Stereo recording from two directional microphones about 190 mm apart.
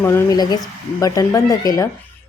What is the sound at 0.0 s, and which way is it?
A woman's voice, 15° left (ahead or behind).